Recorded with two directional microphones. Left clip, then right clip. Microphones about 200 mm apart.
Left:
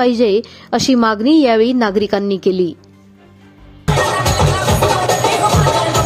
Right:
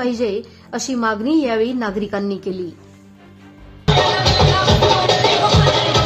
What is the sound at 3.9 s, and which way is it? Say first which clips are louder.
Music: even; 10° right (ahead or behind).